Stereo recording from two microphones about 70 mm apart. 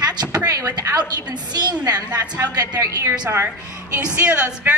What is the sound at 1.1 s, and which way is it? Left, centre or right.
Speech, right.